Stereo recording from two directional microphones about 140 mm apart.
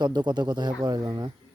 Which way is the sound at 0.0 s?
30° right (ahead or behind).